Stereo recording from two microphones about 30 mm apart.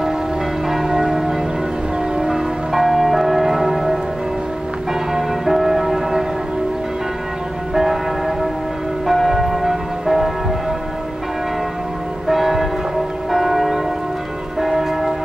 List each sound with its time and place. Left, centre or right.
0.7 s church bell: centre
2.1 s church bell: right
2.7 s change ringing: centre
5.1 s church bell: centre
7.7 s church bell: centre
12.3 s church bell: centre